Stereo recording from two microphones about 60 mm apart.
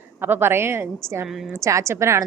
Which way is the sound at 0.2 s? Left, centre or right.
Right.